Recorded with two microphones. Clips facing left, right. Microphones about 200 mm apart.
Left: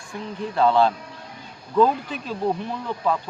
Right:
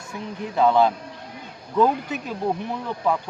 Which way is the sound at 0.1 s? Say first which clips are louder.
Left 1 dB; 10° right (ahead or behind).